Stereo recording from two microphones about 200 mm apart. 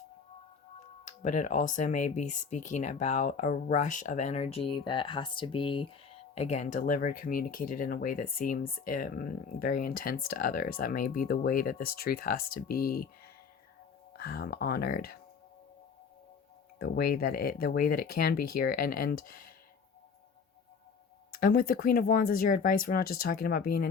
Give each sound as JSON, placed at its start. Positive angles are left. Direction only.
{"t": 1.0, "sound": "speech", "side_deg": 40}
{"t": 14.2, "sound": "speech", "side_deg": 50}
{"t": 16.7, "sound": "speech", "side_deg": 50}
{"t": 21.3, "sound": "speech", "side_deg": 45}